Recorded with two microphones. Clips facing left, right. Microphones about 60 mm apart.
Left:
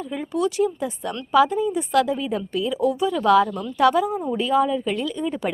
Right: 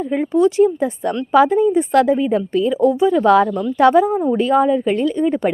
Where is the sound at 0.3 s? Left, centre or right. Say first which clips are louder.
Right 8 dB; right.